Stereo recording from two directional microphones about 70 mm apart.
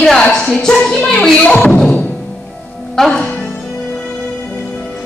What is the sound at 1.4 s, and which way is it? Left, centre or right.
Beatboxing, centre.